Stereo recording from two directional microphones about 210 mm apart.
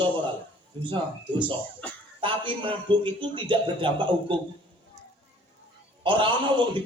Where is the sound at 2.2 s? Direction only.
25° right (ahead or behind).